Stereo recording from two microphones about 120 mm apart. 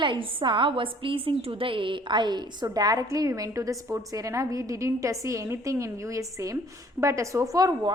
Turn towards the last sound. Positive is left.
turn(degrees=-30)  # may be behind; listen again after turning